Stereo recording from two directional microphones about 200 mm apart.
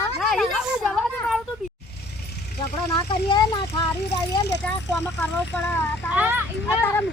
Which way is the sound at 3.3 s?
25° left (ahead or behind).